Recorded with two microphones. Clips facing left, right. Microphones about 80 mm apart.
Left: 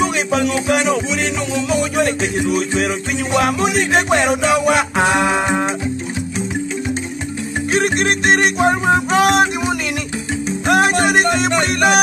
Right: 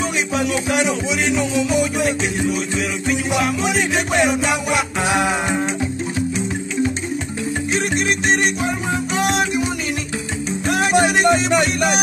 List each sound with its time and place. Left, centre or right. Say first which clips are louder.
0.0 s music: left 4 dB; left
5.2 s music: left 3 dB; left
7.7 s music: left 5 dB; left
10.7 s music: left 3 dB; left